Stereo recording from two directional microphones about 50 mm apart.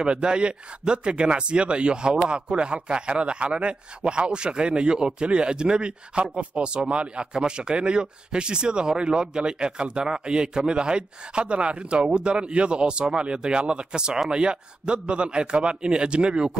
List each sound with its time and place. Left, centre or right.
0.1 s a man's voice: centre